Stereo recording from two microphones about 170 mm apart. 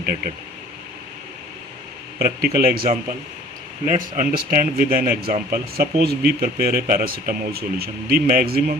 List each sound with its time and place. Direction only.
0.0 s speech: 65° right (ahead or behind)
2.1 s speech: 65° right (ahead or behind)
3.9 s speech: 55° right (ahead or behind)